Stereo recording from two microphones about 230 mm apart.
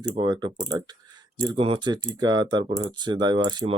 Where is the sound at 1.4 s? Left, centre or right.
Right.